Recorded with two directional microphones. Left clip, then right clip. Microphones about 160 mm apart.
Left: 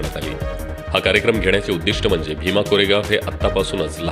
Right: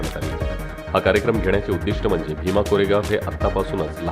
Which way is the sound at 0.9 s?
15° left (ahead or behind).